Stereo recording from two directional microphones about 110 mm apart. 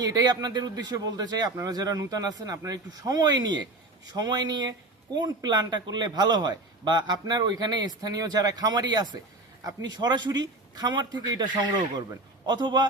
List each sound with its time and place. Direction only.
0.0 s a man's voice: 35° right (ahead or behind)
12.5 s a man's voice: 40° right (ahead or behind)